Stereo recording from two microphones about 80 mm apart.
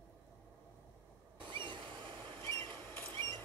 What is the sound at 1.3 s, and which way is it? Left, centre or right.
Vehicle, right.